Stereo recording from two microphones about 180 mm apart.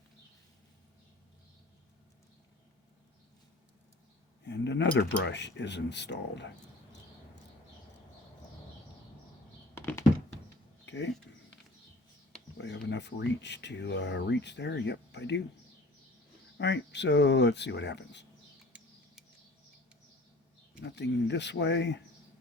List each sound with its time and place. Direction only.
4.4 s speech: 75° left (ahead or behind)
9.7 s computer keyboard: 15° left (ahead or behind)
10.8 s a sound: 85° left
12.5 s speech: 80° left
16.6 s speech: 80° left
20.8 s speech: 75° left (ahead or behind)